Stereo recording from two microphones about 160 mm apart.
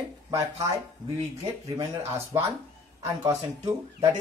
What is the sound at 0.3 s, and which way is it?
Speech, 20° right (ahead or behind).